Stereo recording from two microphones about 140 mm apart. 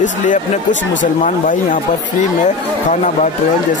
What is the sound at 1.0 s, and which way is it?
Speech, 70° left (ahead or behind).